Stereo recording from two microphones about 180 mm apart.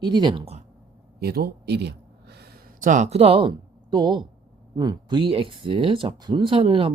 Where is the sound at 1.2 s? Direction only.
60° right (ahead or behind).